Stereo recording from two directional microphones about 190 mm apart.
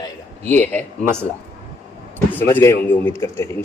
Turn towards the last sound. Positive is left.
turn(degrees=15)  # may be behind; listen again after turning